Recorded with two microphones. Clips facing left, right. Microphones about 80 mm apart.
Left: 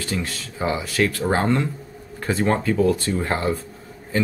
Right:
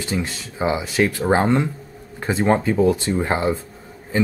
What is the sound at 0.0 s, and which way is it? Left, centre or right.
Speech, centre.